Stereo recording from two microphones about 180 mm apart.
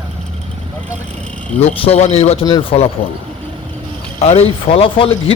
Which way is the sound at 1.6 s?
35° left (ahead or behind).